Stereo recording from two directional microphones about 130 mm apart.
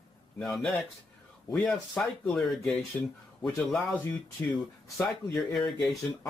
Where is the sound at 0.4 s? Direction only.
5° left (ahead or behind).